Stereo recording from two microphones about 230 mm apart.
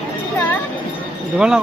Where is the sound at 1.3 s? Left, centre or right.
Centre.